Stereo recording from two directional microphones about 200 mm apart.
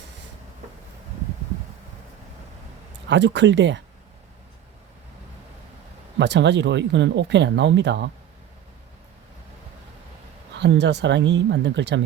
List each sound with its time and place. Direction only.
3.1 s speech: 60° right (ahead or behind)
6.1 s speech: 60° right (ahead or behind)
10.6 s speech: 60° right (ahead or behind)